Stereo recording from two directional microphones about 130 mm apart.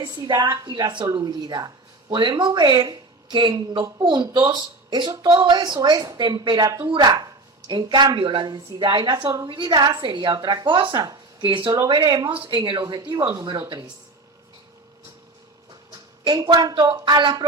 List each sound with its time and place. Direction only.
0.0 s speech: 35° right (ahead or behind)
16.2 s speech: 35° right (ahead or behind)